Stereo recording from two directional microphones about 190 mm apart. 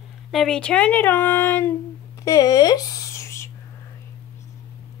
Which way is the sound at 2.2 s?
20° left (ahead or behind).